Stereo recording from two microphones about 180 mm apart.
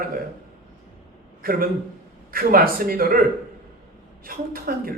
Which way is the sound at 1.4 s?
55° right (ahead or behind).